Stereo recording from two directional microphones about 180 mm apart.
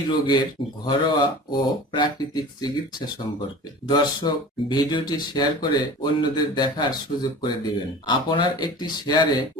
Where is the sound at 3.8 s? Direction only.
25° left (ahead or behind).